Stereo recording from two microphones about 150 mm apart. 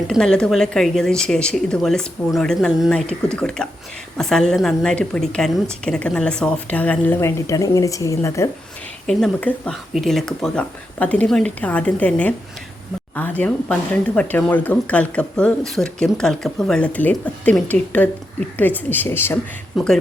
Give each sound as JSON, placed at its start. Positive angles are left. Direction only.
{"t": 0.1, "sound": "a woman's voice", "side_deg": 5}
{"t": 9.0, "sound": "a woman's voice", "side_deg": 5}
{"t": 19.7, "sound": "a woman's voice", "side_deg": 0}